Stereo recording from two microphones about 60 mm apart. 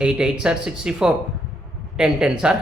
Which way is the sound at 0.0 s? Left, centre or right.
Centre.